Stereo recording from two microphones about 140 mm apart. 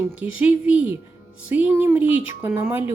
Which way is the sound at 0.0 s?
10° right (ahead or behind).